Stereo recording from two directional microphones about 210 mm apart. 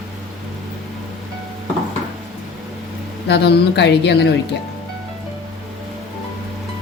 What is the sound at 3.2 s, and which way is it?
A woman's voice, 55° left (ahead or behind).